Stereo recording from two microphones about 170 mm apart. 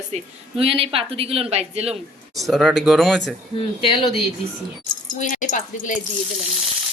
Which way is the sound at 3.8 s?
30° left (ahead or behind).